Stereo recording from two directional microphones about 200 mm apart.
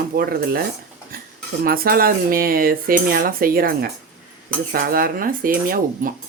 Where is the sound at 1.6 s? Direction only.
45° right (ahead or behind).